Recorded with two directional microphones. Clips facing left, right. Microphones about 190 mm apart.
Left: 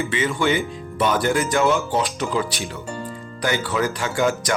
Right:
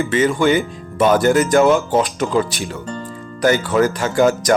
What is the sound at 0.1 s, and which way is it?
Speech, 45° right (ahead or behind).